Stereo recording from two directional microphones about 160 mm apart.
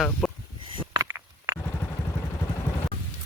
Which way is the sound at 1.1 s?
20° right (ahead or behind).